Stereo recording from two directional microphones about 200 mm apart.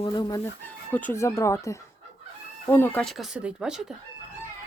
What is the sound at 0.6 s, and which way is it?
Speech, 10° left (ahead or behind).